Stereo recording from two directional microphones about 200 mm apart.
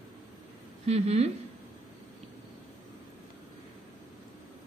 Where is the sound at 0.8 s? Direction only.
35° right (ahead or behind).